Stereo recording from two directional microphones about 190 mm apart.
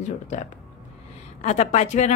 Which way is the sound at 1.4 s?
35° left (ahead or behind).